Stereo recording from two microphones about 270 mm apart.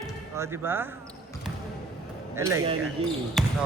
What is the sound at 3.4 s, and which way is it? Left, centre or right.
Basketball bounce, centre.